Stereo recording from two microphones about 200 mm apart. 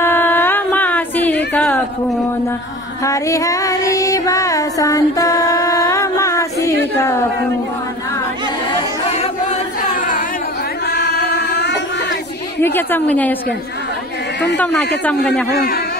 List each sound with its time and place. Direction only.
0.0 s a sound: 10° left (ahead or behind)
3.0 s music: 15° left (ahead or behind)
10.9 s chant: 55° left (ahead or behind)
12.6 s speech: 10° left (ahead or behind)
14.6 s speech: 5° left (ahead or behind)
15.5 s a man's voice: 50° left (ahead or behind)